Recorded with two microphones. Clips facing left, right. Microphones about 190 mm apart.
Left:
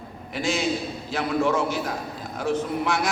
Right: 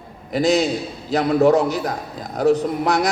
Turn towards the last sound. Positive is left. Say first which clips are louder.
# right 5 dB
turn(degrees=-40)  # may be behind; listen again after turning